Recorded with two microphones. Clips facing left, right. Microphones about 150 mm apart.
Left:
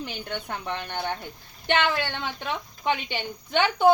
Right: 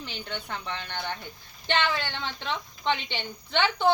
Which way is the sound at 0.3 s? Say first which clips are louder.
Left 2 dB; 15° left (ahead or behind).